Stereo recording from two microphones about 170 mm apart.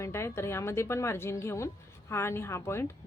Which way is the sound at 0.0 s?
15° left (ahead or behind).